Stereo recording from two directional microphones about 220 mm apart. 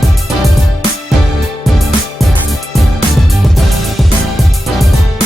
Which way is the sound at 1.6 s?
Centre (ahead or behind).